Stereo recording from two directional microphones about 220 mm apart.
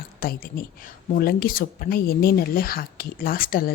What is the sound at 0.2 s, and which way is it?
Speech, 40° left (ahead or behind).